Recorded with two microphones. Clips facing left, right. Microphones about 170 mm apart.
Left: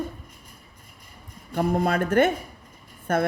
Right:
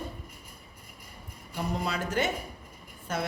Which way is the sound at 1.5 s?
55° left (ahead or behind).